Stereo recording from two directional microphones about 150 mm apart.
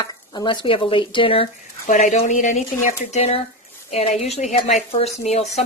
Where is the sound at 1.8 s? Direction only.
55° left (ahead or behind).